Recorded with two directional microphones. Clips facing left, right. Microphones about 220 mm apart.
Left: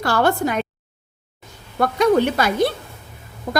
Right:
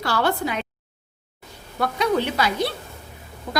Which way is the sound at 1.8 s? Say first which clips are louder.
Left 6 dB; 45° left (ahead or behind).